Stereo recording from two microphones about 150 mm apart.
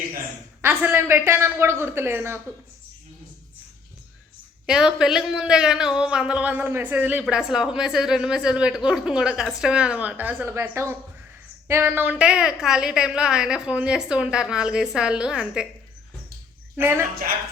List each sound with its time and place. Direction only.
0.6 s speech: 15° right (ahead or behind)
4.6 s a man's voice: 5° right (ahead or behind)
16.8 s speech: 15° right (ahead or behind)